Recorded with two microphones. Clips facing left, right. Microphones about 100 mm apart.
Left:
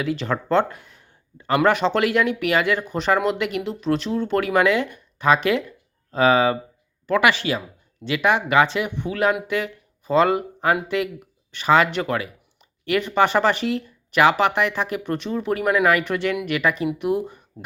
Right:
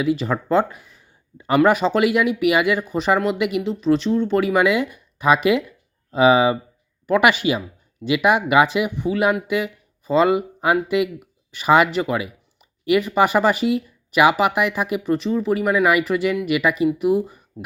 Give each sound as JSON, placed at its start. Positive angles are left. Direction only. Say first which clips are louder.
{"t": 0.0, "sound": "speech", "louder": "right 3 dB", "side_deg": -5}